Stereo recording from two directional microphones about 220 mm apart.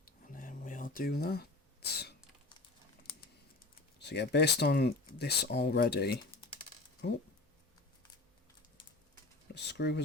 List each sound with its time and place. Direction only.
0.0 s a sound: 40° left (ahead or behind)
4.0 s speech: 50° left (ahead or behind)
9.6 s speech: 50° left (ahead or behind)